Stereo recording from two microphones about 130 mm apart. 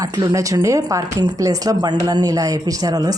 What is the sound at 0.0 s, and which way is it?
A woman's voice, 30° right (ahead or behind).